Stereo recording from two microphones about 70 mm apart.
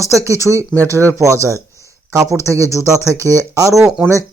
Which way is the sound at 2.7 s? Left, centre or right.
Left.